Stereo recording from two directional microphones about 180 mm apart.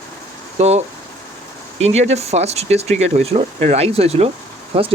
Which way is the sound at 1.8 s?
35° right (ahead or behind).